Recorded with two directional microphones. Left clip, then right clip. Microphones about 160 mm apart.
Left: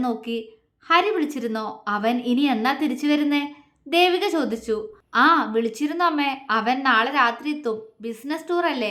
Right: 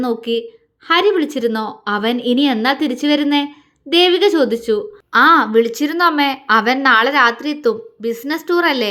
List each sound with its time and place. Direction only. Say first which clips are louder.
0.0 s a woman's voice: right 8 dB; 25° right (ahead or behind)